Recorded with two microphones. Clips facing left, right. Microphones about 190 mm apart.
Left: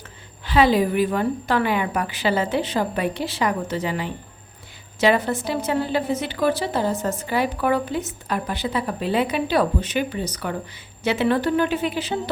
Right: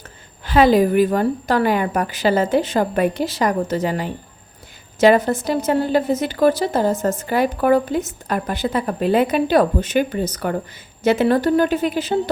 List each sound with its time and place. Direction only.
0.4 s a woman's voice: 45° right (ahead or behind)